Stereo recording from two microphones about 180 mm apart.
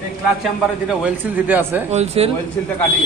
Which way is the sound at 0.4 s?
5° right (ahead or behind).